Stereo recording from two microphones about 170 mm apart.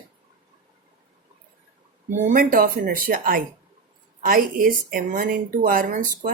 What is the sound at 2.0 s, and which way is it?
Speech, 50° right (ahead or behind).